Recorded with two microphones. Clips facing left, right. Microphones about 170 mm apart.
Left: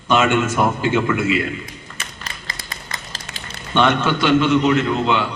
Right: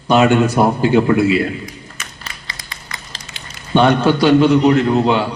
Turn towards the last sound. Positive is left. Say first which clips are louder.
# right 4 dB
turn(degrees=-40)  # may be behind; listen again after turning